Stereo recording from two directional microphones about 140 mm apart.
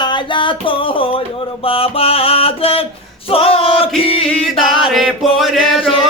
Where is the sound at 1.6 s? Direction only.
40° left (ahead or behind).